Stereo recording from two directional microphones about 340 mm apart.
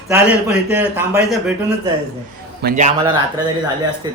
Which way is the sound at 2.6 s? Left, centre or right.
Right.